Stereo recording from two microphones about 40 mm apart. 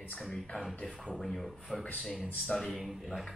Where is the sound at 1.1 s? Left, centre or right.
Centre.